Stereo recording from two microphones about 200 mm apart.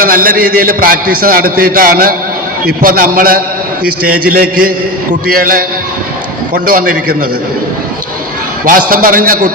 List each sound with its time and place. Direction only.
0.0 s a man's voice: 45° right (ahead or behind)
8.6 s a man's voice: 45° right (ahead or behind)